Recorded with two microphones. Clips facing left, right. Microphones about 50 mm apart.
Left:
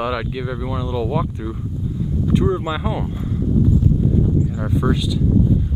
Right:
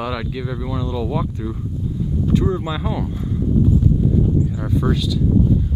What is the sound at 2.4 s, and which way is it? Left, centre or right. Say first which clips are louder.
Speech: left 2 dB; centre.